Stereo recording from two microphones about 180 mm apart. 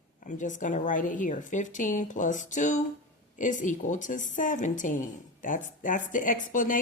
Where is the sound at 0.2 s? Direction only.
45° left (ahead or behind).